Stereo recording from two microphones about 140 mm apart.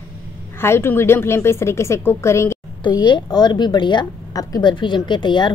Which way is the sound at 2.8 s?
35° left (ahead or behind).